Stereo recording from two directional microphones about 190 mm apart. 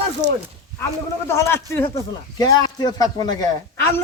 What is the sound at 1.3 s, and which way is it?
Speech, 15° left (ahead or behind).